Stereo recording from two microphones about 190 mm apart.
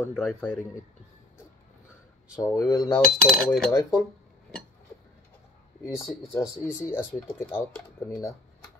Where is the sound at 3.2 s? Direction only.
Centre (ahead or behind).